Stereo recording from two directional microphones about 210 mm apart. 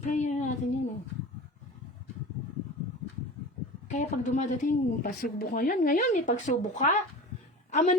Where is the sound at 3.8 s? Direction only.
35° left (ahead or behind).